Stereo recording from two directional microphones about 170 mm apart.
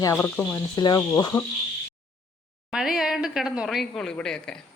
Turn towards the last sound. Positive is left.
turn(degrees=5)  # may be behind; listen again after turning